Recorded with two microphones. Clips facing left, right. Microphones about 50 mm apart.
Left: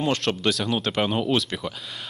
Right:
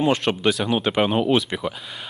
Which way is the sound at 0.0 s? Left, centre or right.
Centre.